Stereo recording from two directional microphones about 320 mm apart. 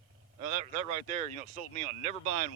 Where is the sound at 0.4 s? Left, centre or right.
Right.